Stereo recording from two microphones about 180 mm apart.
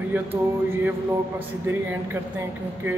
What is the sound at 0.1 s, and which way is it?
Speech, 10° right (ahead or behind).